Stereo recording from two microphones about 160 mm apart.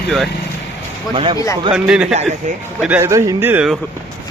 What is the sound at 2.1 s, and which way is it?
Speech, 45° right (ahead or behind).